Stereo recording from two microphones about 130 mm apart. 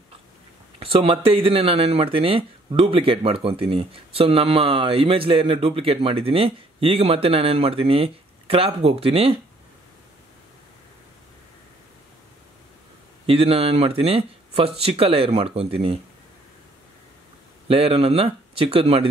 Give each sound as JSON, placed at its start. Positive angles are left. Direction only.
{"t": 0.7, "sound": "speech", "side_deg": -45}
{"t": 13.3, "sound": "speech", "side_deg": -50}
{"t": 17.6, "sound": "speech", "side_deg": -50}